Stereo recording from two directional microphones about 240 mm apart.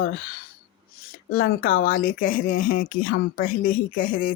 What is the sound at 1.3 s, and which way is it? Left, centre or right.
Speech, left.